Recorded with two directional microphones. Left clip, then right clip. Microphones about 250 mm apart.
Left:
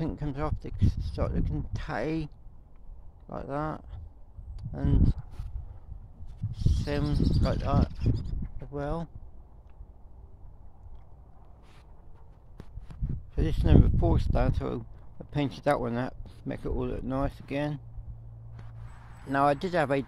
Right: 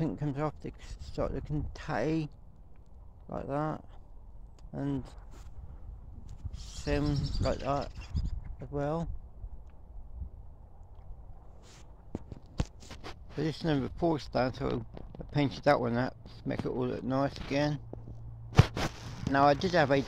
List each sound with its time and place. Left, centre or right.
0.0 s speech: centre
6.5 s speech: centre
7.2 s speech: left
7.6 s speech: centre
7.9 s speech: left
8.5 s speech: centre
13.4 s speech: centre
19.3 s speech: centre